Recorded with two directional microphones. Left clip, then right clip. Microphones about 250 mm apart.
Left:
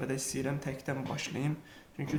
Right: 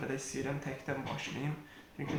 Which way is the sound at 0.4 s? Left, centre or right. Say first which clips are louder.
Left 2 dB; left.